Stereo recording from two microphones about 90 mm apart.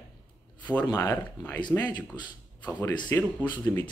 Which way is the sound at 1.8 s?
55° left (ahead or behind).